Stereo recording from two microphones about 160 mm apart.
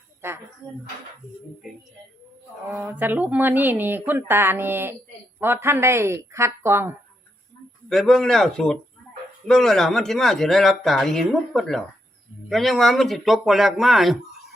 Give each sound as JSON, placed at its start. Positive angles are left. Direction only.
{"t": 0.2, "sound": "speech", "side_deg": -15}
{"t": 2.8, "sound": "speech", "side_deg": -10}
{"t": 7.9, "sound": "speech", "side_deg": 5}